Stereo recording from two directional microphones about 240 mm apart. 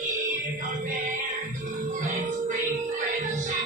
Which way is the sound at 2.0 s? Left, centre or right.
Right.